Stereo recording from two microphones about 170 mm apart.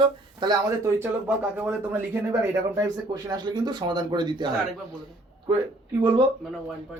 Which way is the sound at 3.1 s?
25° right (ahead or behind).